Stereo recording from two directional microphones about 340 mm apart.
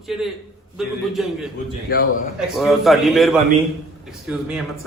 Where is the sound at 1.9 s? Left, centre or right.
Left.